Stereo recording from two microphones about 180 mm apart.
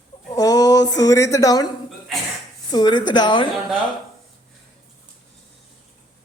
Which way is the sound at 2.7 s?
25° left (ahead or behind).